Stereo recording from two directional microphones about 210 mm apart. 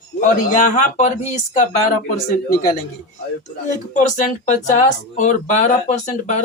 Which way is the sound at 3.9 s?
35° left (ahead or behind).